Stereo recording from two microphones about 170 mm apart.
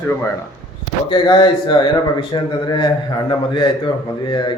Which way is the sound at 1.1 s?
30° left (ahead or behind).